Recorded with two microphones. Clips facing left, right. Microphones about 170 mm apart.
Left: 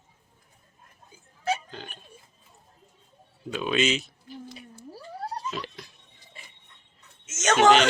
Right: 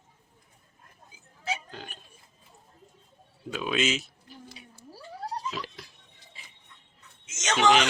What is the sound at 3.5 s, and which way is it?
Speech, centre (ahead or behind).